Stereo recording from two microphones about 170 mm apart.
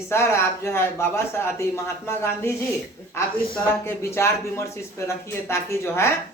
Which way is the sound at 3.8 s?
15° left (ahead or behind).